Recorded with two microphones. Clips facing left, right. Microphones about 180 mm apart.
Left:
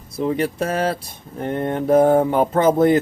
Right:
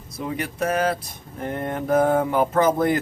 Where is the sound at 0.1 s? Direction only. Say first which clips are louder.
Left 8 dB; 30° left (ahead or behind).